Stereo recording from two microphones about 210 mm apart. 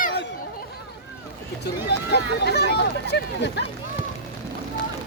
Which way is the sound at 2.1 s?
50° left (ahead or behind).